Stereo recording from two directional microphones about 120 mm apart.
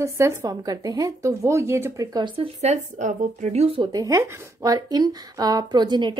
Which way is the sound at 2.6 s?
75° right (ahead or behind).